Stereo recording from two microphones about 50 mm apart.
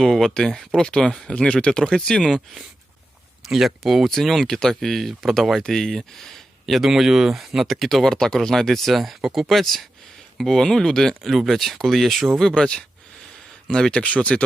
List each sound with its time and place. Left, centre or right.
0.0 s speech: centre
2.2 s speech: centre
4.4 s speech: centre
12.4 s speech: centre
13.9 s speech: left